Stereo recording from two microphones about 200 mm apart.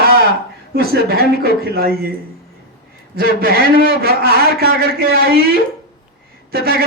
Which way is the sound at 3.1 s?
50° right (ahead or behind).